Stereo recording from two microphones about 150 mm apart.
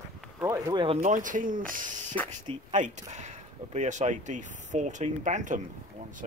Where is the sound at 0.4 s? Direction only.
20° right (ahead or behind).